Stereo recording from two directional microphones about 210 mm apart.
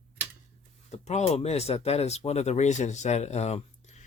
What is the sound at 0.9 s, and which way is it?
Speech, 30° left (ahead or behind).